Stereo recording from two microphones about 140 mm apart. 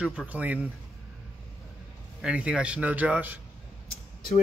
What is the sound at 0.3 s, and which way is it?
Speech, 10° right (ahead or behind).